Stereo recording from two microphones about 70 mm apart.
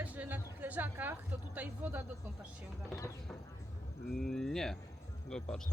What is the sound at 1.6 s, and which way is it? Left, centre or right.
Speech, right.